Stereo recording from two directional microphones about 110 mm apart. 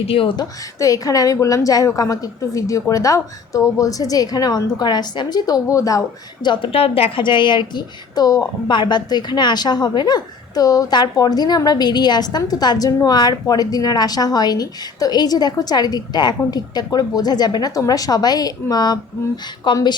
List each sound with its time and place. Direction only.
0.0 s speech: 60° left (ahead or behind)
0.3 s a woman's voice: 35° left (ahead or behind)